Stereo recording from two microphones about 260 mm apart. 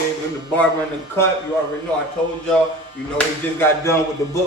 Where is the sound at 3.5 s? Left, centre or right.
Centre.